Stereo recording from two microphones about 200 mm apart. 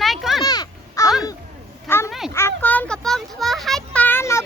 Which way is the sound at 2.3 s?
10° left (ahead or behind).